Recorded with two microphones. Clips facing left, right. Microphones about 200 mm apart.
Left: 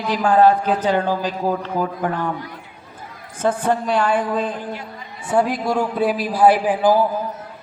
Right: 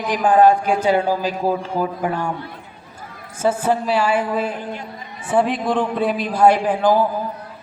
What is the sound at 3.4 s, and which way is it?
A man's voice, 5° right (ahead or behind).